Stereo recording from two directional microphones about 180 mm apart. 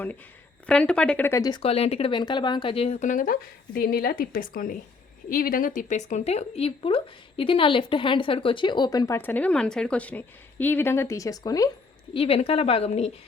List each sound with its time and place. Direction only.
0.7 s speech: 5° left (ahead or behind)
12.1 s speech: 30° left (ahead or behind)